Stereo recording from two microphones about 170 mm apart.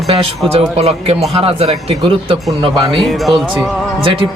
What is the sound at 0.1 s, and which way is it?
A man's voice, 35° right (ahead or behind).